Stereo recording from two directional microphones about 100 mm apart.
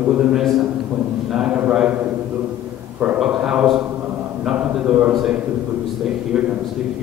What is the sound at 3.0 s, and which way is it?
A man's voice, 15° right (ahead or behind).